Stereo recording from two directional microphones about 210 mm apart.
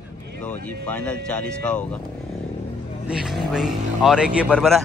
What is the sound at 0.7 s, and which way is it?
Speech, 5° left (ahead or behind).